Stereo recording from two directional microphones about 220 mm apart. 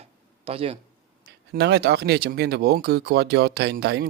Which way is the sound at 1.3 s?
50° right (ahead or behind).